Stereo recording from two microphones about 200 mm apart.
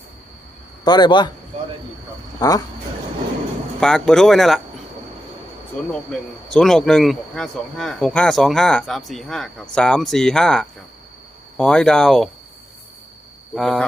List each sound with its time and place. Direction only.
0.9 s a man's voice: 20° left (ahead or behind)
2.4 s a man's voice: 20° left (ahead or behind)
3.8 s speech: 5° left (ahead or behind)
5.9 s speech: 5° left (ahead or behind)
13.6 s speech: centre (ahead or behind)